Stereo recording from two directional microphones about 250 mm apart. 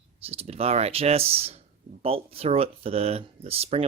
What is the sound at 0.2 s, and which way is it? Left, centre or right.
Speech, right.